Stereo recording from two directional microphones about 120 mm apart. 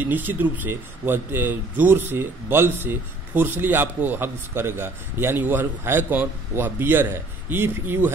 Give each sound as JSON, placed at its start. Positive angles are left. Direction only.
{"t": 0.0, "sound": "speech", "side_deg": -15}